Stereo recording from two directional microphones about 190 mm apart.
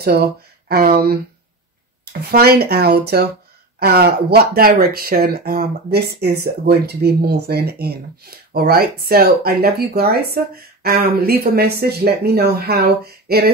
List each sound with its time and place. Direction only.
0.7 s speech: 55° right (ahead or behind)
2.3 s speech: 55° right (ahead or behind)